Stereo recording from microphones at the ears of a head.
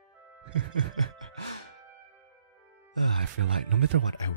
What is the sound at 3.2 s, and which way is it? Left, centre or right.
Speech, right.